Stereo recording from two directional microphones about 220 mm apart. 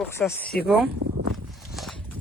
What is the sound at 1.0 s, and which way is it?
Walk, 50° right (ahead or behind).